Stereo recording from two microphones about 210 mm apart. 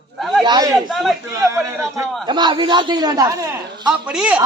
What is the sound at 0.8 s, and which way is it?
Speech, centre (ahead or behind).